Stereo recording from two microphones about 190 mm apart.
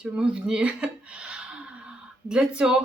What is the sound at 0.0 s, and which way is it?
Speech, 5° right (ahead or behind).